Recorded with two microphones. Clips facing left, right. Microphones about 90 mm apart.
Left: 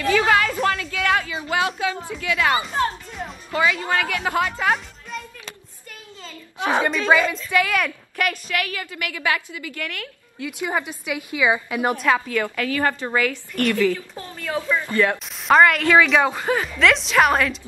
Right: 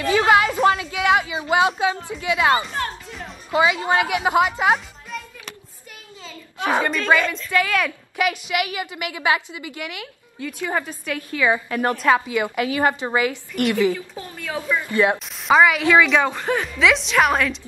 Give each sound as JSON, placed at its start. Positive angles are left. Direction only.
{"t": 0.2, "sound": "a sound", "side_deg": -20}
{"t": 2.1, "sound": "a woman's voice", "side_deg": -20}
{"t": 5.1, "sound": "a sound", "side_deg": 0}
{"t": 6.6, "sound": "a woman's voice", "side_deg": 15}
{"t": 6.9, "sound": "a woman's voice", "side_deg": 5}
{"t": 8.2, "sound": "a woman's voice", "side_deg": -15}
{"t": 10.6, "sound": "a woman's voice", "side_deg": 10}
{"t": 12.1, "sound": "a woman's voice", "side_deg": -15}
{"t": 14.1, "sound": "a woman's voice", "side_deg": -5}
{"t": 15.4, "sound": "a woman's voice", "side_deg": -5}